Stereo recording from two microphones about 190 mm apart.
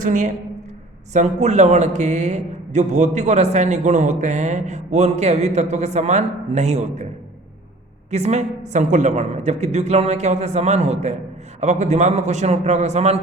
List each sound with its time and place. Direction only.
0.0 s a man's voice: 40° right (ahead or behind)
8.1 s a man's voice: 35° right (ahead or behind)